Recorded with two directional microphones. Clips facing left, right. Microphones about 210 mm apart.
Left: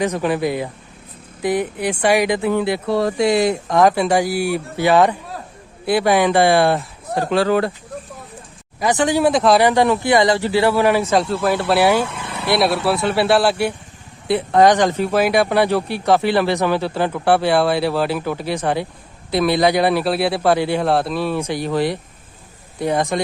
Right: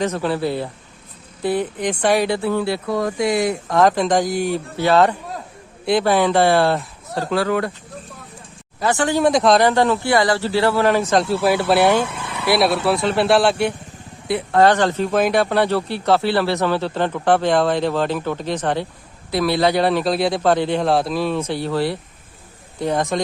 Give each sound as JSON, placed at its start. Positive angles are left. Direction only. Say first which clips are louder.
{"t": 0.0, "sound": "speech", "louder": "left 2 dB", "side_deg": 15}
{"t": 2.8, "sound": "speech", "louder": "left 3 dB", "side_deg": 30}
{"t": 3.7, "sound": "speech", "louder": "even", "side_deg": 10}
{"t": 8.8, "sound": "speech", "louder": "left 1 dB", "side_deg": 15}
{"t": 11.2, "sound": "speech", "louder": "right 1 dB", "side_deg": -5}
{"t": 14.5, "sound": "speech", "louder": "left 1 dB", "side_deg": 15}
{"t": 21.3, "sound": "speech", "louder": "left 1 dB", "side_deg": 15}